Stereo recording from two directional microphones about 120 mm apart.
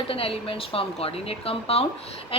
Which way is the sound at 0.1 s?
50° left (ahead or behind).